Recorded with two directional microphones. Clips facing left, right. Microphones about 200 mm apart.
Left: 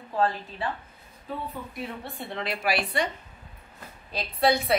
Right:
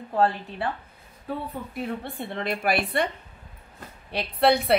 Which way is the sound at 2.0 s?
55° right (ahead or behind).